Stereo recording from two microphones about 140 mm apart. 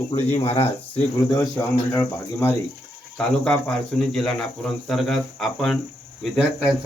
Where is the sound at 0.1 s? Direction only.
45° left (ahead or behind).